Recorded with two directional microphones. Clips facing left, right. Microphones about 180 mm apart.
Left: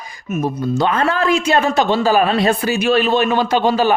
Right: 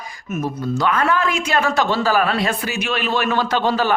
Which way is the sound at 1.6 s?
20° left (ahead or behind).